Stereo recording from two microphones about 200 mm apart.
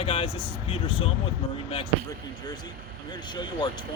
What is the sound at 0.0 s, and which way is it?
Speech, 30° left (ahead or behind).